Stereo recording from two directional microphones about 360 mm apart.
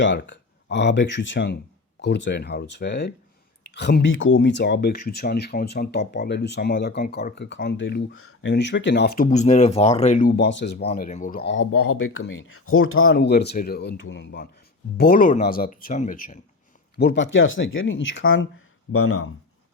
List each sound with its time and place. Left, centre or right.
0.0 s speech: left